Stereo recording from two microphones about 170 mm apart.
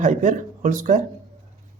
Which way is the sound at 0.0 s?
45° right (ahead or behind).